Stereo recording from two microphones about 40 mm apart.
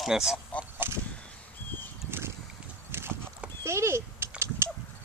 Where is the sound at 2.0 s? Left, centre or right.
Right.